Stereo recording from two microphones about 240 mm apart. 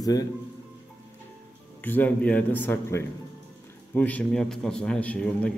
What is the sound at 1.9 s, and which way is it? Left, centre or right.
A man's voice, centre.